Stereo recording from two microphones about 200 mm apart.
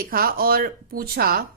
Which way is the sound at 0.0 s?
45° right (ahead or behind).